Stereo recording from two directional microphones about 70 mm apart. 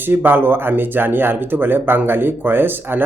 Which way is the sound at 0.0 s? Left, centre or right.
Right.